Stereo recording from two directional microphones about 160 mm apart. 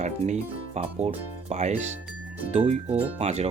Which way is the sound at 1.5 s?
45° right (ahead or behind).